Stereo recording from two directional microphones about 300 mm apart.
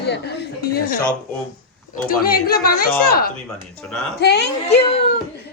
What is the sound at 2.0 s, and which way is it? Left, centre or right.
A woman's voice, left.